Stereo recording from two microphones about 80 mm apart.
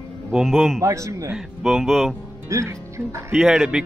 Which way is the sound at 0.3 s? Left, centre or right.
Centre.